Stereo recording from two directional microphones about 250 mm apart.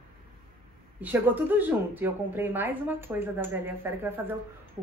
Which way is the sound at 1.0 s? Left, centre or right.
Centre.